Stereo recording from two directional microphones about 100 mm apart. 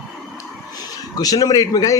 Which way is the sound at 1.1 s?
35° left (ahead or behind).